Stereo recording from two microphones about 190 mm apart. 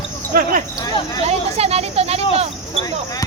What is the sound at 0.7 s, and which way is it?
Speech, 20° left (ahead or behind).